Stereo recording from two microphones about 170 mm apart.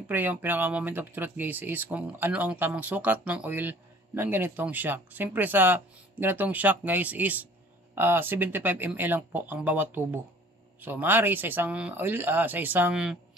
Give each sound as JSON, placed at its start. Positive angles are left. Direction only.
{"t": 0.0, "sound": "speech", "side_deg": -10}